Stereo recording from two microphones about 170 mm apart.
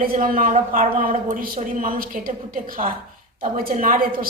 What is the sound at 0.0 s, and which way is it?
A woman's voice, 55° right (ahead or behind).